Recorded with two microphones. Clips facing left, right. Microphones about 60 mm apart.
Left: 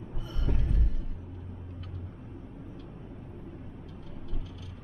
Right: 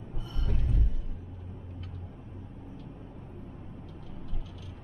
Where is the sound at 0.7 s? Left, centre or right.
Left.